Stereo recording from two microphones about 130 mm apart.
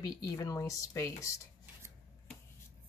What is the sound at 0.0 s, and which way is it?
Speech, 25° left (ahead or behind).